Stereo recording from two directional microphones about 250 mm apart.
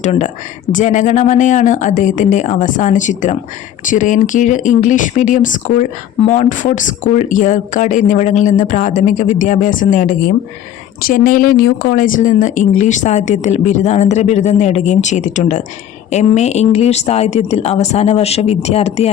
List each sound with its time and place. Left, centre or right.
0.0 s speech: left